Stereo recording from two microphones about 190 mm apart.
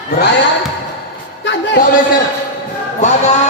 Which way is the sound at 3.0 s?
35° left (ahead or behind).